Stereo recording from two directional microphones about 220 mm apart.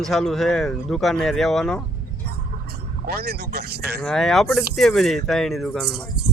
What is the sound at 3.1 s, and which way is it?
Speech, 45° right (ahead or behind).